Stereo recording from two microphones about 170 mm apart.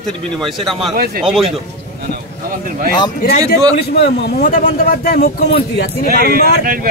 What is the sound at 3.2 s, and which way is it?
Speech, 65° left (ahead or behind).